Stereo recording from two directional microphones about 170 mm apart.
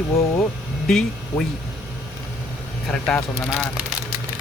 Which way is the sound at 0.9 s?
5° left (ahead or behind).